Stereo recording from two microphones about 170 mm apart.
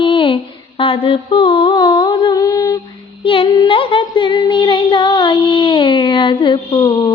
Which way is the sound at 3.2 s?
30° left (ahead or behind).